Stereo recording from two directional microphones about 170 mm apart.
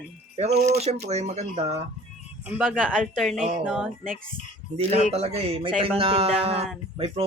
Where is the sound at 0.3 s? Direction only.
40° right (ahead or behind).